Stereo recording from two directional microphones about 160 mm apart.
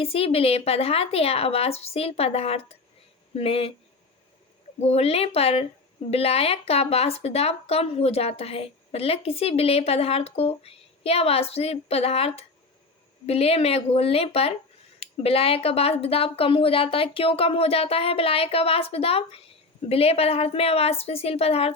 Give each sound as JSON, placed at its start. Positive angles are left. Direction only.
{"t": 0.0, "sound": "speech", "side_deg": 40}
{"t": 4.8, "sound": "speech", "side_deg": 40}